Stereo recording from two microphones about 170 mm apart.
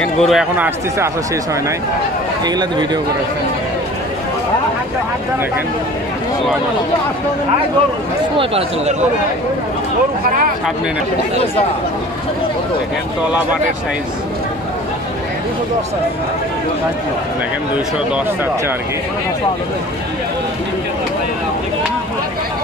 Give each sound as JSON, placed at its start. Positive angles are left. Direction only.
{"t": 0.0, "sound": "speech", "side_deg": 0}
{"t": 0.9, "sound": "speech", "side_deg": -20}
{"t": 8.4, "sound": "speech", "side_deg": -35}